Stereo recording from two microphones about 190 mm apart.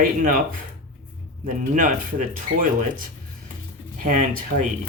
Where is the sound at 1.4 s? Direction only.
45° right (ahead or behind).